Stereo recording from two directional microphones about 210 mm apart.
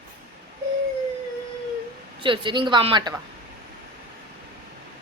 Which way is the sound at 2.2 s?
25° right (ahead or behind).